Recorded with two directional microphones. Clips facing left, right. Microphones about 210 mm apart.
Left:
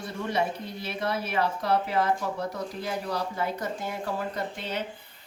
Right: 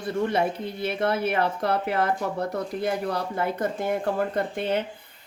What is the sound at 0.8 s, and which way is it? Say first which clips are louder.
Speech: right 6 dB; 55° right (ahead or behind).